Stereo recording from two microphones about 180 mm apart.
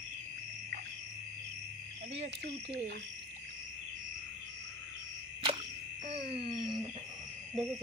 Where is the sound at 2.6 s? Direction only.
40° right (ahead or behind).